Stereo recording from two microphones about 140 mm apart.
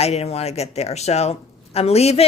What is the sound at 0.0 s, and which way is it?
Speech, 50° left (ahead or behind).